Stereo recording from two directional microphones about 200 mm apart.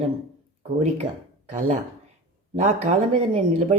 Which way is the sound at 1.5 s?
40° right (ahead or behind).